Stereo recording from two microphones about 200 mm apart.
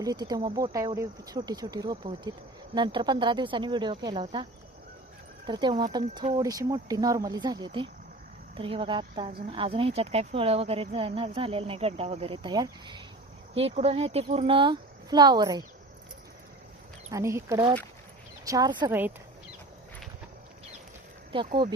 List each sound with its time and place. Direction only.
0.0 s a woman's voice: 20° right (ahead or behind)
5.5 s a woman's voice: 25° right (ahead or behind)
17.1 s a woman's voice: 15° right (ahead or behind)
18.9 s speech: 10° right (ahead or behind)
21.3 s a woman's voice: 25° right (ahead or behind)